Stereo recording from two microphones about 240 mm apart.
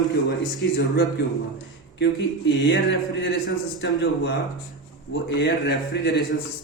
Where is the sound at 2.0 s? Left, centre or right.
Left.